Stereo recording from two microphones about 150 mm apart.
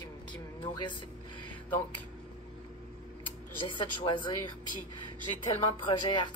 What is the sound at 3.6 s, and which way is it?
Speech, 35° left (ahead or behind).